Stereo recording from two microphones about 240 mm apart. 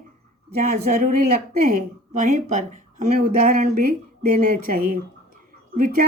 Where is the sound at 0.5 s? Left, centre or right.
Right.